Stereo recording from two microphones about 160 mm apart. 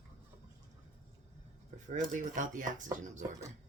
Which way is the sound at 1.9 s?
50° right (ahead or behind).